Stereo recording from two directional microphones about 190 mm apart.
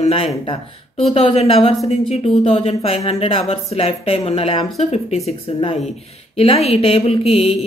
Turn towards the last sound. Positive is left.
turn(degrees=30)  # may be behind; listen again after turning